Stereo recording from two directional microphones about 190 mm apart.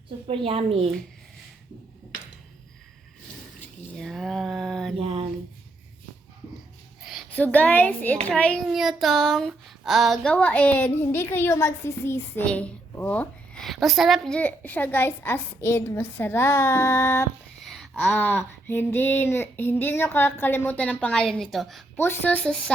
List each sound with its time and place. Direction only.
0.3 s a woman's voice: 30° right (ahead or behind)
3.9 s a sound: centre (ahead or behind)
4.9 s a sound: 30° right (ahead or behind)
7.0 s a woman's voice: centre (ahead or behind)
8.3 s child singing: 5° left (ahead or behind)
17.6 s child singing: centre (ahead or behind)
21.9 s child singing: 10° left (ahead or behind)